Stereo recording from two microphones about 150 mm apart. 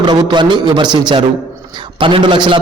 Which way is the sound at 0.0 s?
30° right (ahead or behind).